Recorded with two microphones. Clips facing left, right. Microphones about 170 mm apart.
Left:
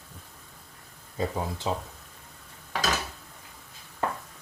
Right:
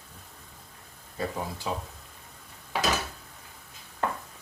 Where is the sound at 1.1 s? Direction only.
20° left (ahead or behind).